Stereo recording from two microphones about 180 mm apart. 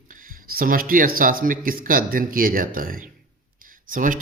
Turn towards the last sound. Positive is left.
turn(degrees=-45)  # may be behind; listen again after turning